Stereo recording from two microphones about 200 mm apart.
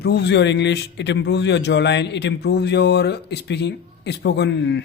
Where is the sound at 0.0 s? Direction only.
55° left (ahead or behind).